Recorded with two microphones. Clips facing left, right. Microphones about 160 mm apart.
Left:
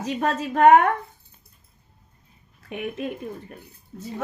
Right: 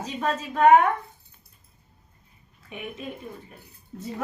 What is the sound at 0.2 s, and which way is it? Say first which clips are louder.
Speech: left 2 dB; 50° left (ahead or behind).